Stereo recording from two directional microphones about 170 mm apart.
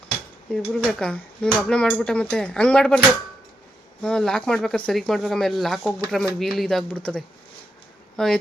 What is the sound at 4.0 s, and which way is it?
Speech, 5° left (ahead or behind).